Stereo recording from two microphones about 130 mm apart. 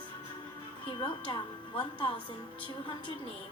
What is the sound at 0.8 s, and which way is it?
Speech, 40° left (ahead or behind).